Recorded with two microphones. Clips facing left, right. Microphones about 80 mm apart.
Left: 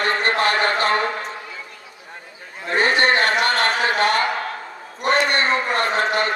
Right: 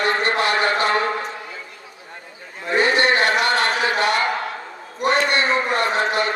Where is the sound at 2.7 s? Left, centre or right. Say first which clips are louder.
Even; left.